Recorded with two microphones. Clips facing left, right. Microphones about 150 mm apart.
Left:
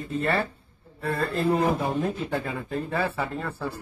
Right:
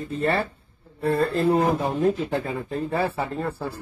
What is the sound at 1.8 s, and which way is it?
A man's voice, 30° right (ahead or behind).